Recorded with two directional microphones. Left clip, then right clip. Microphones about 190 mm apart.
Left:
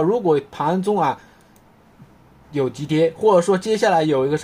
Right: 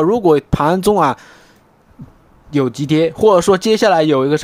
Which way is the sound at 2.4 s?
45° right (ahead or behind).